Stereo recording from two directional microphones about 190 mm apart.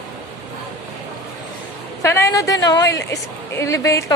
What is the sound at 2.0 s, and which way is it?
A woman's voice, 15° left (ahead or behind).